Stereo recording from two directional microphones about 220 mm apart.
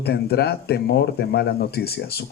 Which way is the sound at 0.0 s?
45° left (ahead or behind).